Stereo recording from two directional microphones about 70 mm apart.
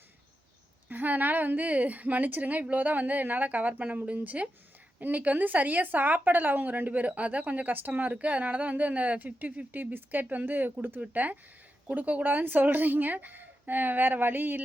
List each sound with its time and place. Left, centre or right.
0.9 s speech: right